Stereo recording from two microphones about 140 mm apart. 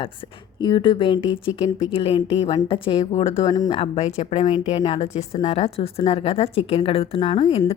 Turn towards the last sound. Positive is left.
turn(degrees=45)  # may be behind; listen again after turning